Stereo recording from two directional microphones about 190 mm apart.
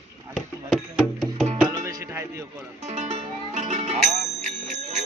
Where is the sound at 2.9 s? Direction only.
35° right (ahead or behind).